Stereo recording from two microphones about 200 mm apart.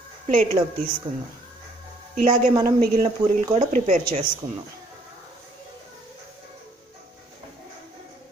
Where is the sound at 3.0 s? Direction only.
30° right (ahead or behind).